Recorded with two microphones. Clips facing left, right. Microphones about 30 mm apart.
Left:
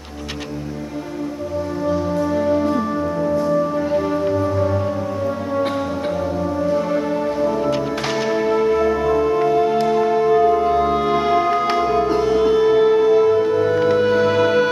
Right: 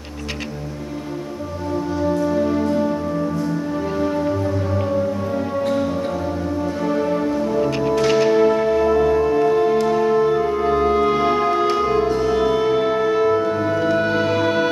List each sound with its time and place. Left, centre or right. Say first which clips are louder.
2.6 s music: even; centre
3.9 s music: even; centre
6.7 s music: even; centre
7.2 s music: left 1 dB; centre
8.3 s music: right 2 dB; centre